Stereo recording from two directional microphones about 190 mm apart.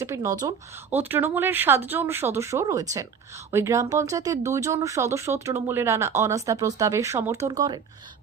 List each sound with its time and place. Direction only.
0.0 s speech: 15° right (ahead or behind)